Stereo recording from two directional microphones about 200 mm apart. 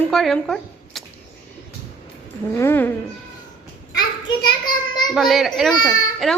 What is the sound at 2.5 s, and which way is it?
Speech, 10° left (ahead or behind).